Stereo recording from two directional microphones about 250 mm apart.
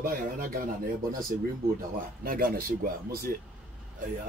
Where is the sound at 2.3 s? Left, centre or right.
Right.